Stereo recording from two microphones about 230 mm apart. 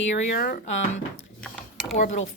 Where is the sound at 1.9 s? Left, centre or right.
Left.